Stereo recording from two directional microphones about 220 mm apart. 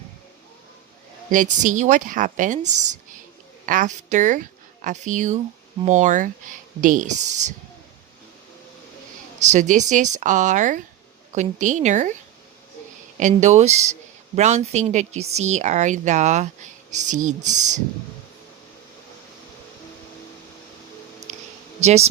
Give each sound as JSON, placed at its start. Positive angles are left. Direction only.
{"t": 1.3, "sound": "a woman's voice", "side_deg": -35}
{"t": 9.5, "sound": "speech", "side_deg": -35}
{"t": 13.1, "sound": "speech", "side_deg": -30}
{"t": 21.8, "sound": "speech", "side_deg": -30}